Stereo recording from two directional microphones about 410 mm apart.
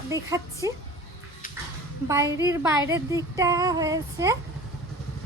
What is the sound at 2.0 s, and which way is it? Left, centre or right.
A child's voice, centre.